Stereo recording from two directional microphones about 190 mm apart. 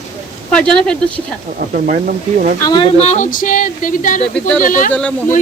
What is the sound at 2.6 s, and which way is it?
Speech, 20° left (ahead or behind).